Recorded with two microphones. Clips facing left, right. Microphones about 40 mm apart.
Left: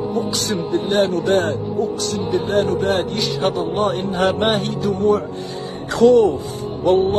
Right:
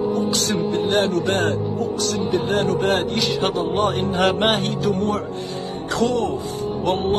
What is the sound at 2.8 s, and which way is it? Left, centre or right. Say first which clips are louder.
Speech: left 1 dB; right.